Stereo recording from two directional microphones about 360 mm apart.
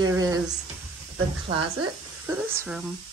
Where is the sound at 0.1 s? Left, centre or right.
Centre.